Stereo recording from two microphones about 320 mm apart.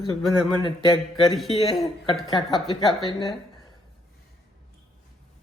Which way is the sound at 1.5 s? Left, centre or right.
Centre.